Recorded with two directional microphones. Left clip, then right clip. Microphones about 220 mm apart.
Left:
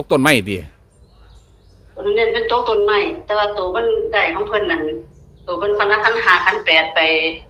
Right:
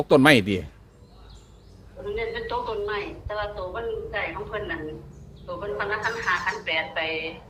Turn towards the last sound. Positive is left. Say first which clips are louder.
# left 13 dB
turn(degrees=55)  # may be behind; listen again after turning